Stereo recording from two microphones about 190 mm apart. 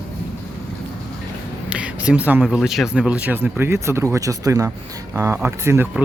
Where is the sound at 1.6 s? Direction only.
5° right (ahead or behind).